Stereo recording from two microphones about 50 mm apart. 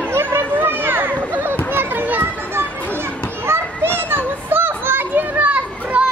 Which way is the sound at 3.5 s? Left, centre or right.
Right.